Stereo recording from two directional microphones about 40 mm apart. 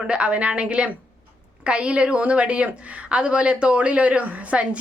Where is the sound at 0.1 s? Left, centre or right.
Right.